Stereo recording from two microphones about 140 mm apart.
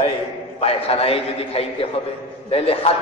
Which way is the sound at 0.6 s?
45° left (ahead or behind).